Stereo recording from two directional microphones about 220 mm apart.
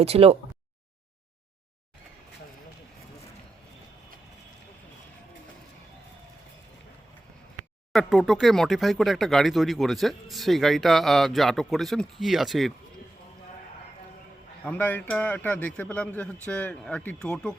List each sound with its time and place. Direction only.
0.0 s speech: 25° right (ahead or behind)
7.9 s speech: centre (ahead or behind)
14.6 s speech: 5° left (ahead or behind)